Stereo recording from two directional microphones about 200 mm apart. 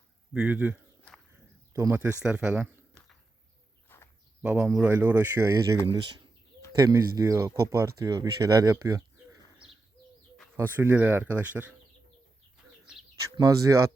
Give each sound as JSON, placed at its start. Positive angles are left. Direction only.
{"t": 0.3, "sound": "speech", "side_deg": -5}
{"t": 2.2, "sound": "a sound", "side_deg": -5}
{"t": 3.8, "sound": "a sound", "side_deg": 10}
{"t": 4.4, "sound": "speech", "side_deg": -10}
{"t": 10.6, "sound": "speech", "side_deg": -10}
{"t": 13.3, "sound": "speech", "side_deg": -15}